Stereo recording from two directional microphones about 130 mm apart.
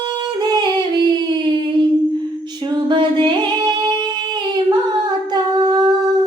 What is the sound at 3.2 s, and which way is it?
Music, 35° right (ahead or behind).